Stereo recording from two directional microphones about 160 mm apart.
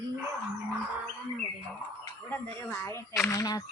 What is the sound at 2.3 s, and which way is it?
Speech, 15° left (ahead or behind).